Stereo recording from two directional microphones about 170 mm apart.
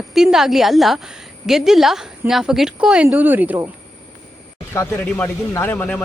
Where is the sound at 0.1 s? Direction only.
Centre (ahead or behind).